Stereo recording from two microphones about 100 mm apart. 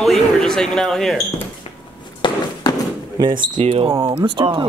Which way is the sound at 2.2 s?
50° left (ahead or behind).